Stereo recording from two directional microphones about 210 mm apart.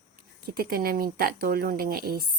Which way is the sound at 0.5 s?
45° right (ahead or behind).